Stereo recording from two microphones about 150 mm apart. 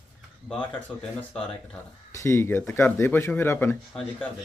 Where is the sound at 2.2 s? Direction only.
15° left (ahead or behind).